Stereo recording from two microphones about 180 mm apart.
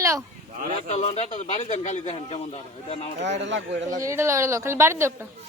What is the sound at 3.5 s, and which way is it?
Speech, 90° right.